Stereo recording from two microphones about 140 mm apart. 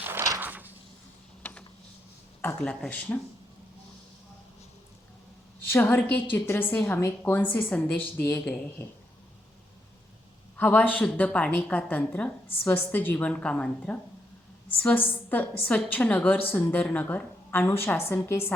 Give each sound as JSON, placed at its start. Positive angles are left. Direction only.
{"t": 0.0, "sound": "a sound", "side_deg": -20}
{"t": 1.4, "sound": "mechanisms", "side_deg": 10}
{"t": 2.4, "sound": "a woman's voice", "side_deg": 10}
{"t": 5.7, "sound": "a woman's voice", "side_deg": 15}
{"t": 10.6, "sound": "a woman's voice", "side_deg": 10}